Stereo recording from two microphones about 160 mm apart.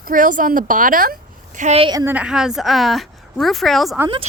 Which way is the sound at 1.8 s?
25° right (ahead or behind).